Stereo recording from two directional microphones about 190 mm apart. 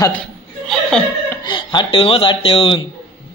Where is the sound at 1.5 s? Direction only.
25° left (ahead or behind).